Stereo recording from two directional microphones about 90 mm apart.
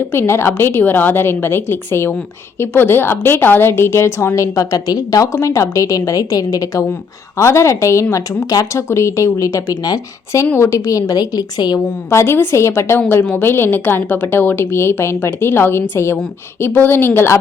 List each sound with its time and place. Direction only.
0.1 s a woman's voice: 25° left (ahead or behind); by 10.4 s 45° left (ahead or behind)
10.4 s a woman's voice: 25° left (ahead or behind); by 11.8 s 50° left (ahead or behind)
12.1 s a woman's voice: 30° left (ahead or behind)